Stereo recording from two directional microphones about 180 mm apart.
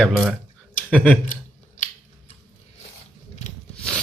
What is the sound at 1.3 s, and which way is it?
Scissors, 45° left (ahead or behind).